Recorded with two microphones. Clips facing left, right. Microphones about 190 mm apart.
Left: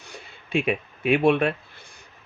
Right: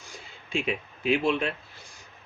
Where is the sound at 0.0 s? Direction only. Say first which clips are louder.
Left 3 dB; 65° left (ahead or behind).